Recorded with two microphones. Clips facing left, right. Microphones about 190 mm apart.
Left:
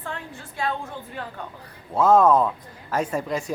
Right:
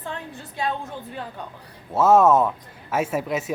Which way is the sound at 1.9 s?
5° right (ahead or behind).